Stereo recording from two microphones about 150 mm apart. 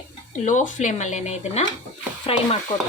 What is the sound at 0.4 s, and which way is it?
Speech, 55° left (ahead or behind).